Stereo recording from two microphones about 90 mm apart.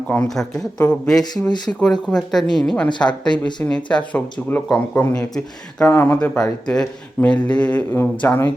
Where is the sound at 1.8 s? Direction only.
5° left (ahead or behind).